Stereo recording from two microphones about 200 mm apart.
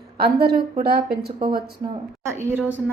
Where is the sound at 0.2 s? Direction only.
50° right (ahead or behind).